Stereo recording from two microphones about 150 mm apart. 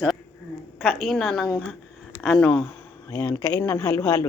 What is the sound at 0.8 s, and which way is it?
A woman's voice, centre (ahead or behind).